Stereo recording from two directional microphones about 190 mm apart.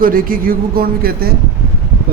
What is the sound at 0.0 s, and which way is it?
Speech, 50° right (ahead or behind).